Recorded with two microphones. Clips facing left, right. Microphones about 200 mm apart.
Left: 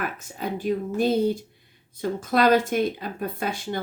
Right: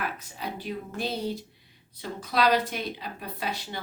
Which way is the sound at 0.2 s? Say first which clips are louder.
Left 7 dB; 50° left (ahead or behind).